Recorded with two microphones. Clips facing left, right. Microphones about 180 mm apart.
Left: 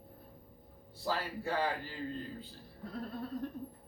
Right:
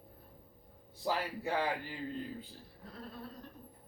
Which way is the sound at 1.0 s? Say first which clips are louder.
Right 1 dB; 15° right (ahead or behind).